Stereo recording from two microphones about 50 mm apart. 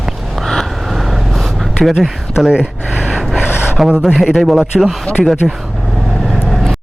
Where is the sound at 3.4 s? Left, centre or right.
Left.